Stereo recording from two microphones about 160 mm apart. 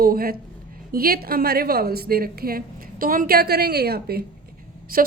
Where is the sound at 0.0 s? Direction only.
70° right (ahead or behind).